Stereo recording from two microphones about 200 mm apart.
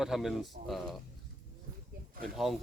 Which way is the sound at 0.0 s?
Centre (ahead or behind).